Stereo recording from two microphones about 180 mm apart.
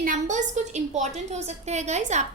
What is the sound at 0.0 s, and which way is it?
A woman's voice, 45° right (ahead or behind).